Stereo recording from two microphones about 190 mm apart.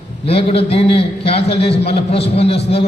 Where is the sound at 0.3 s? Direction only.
30° left (ahead or behind).